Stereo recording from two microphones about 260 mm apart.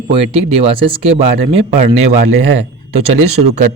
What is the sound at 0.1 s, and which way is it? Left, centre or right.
Speech, right.